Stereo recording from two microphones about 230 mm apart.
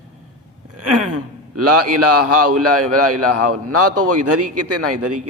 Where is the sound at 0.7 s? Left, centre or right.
Right.